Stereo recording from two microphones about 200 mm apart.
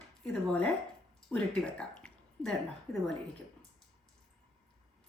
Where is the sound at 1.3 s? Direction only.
5° left (ahead or behind).